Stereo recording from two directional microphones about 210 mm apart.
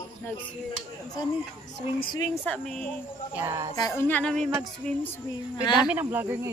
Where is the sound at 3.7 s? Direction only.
20° left (ahead or behind).